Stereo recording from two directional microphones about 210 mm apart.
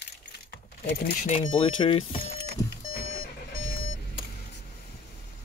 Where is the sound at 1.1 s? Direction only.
30° left (ahead or behind).